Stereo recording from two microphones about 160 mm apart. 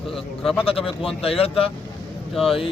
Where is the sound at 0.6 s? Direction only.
35° left (ahead or behind).